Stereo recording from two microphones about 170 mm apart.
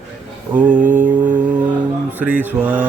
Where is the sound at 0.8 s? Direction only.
50° right (ahead or behind).